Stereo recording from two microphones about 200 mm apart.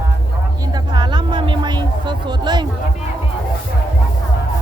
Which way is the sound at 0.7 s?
20° right (ahead or behind).